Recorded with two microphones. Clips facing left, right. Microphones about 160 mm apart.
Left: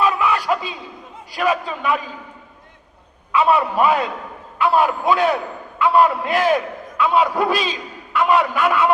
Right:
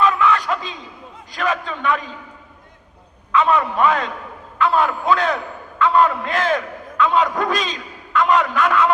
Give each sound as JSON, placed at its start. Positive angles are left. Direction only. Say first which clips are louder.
{"t": 0.0, "sound": "a sound", "louder": "right 1 dB", "side_deg": 10}
{"t": 1.4, "sound": "a man's voice", "louder": "left 2 dB", "side_deg": 10}
{"t": 3.3, "sound": "a man's voice", "louder": "left 1 dB", "side_deg": 10}